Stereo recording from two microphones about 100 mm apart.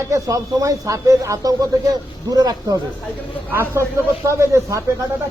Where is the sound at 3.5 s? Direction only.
30° right (ahead or behind).